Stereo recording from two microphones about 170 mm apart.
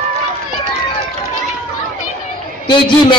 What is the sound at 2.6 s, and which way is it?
Speech, 25° left (ahead or behind).